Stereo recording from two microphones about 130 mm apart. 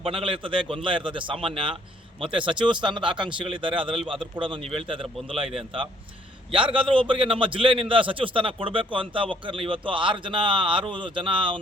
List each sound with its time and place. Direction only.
0.0 s a man's voice: 45° right (ahead or behind)
6.7 s a man's voice: 40° right (ahead or behind)